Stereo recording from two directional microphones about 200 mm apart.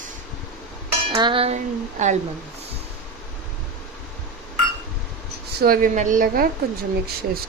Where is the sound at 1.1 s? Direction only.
25° right (ahead or behind).